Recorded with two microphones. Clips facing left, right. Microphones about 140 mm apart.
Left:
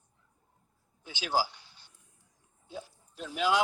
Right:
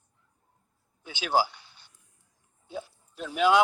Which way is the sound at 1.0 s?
65° right (ahead or behind).